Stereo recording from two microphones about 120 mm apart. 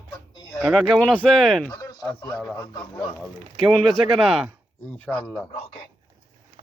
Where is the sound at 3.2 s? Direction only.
Centre (ahead or behind).